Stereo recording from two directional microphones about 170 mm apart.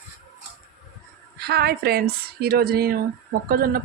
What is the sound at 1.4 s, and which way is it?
Speech, 70° right (ahead or behind).